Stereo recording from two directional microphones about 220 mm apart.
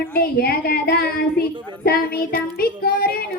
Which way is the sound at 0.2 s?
45° left (ahead or behind).